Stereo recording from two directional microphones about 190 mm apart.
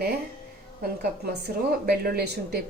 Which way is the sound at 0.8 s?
55° right (ahead or behind).